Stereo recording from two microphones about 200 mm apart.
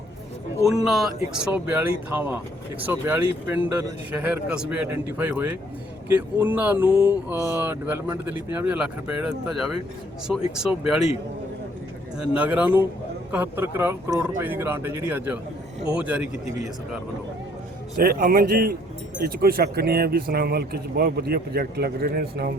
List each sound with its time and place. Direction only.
0.9 s speech: centre (ahead or behind)
12.2 s speech: 5° right (ahead or behind)
17.9 s speech: 50° right (ahead or behind)